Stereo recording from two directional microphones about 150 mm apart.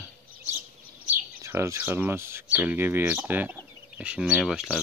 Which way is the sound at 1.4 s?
20° right (ahead or behind).